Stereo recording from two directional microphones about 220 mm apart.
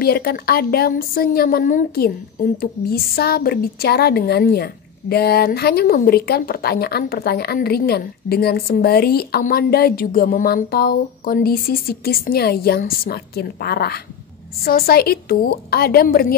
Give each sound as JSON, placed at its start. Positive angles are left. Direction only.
{"t": 0.0, "sound": "speech", "side_deg": 45}